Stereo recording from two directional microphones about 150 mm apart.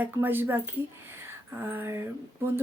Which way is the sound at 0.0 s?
15° right (ahead or behind).